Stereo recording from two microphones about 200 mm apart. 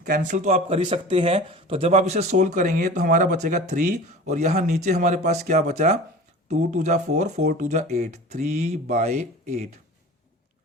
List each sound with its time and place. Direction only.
0.0 s speech: 40° right (ahead or behind)